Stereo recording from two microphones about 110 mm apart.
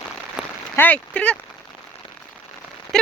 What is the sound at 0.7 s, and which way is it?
Speech, 15° left (ahead or behind).